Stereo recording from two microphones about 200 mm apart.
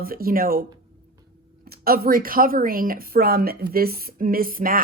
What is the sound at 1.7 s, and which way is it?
A woman's voice, 50° right (ahead or behind).